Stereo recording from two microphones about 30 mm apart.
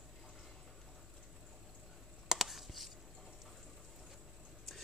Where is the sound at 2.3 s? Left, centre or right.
Centre.